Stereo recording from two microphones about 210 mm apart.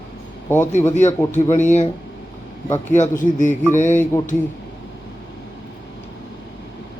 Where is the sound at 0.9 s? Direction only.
35° left (ahead or behind).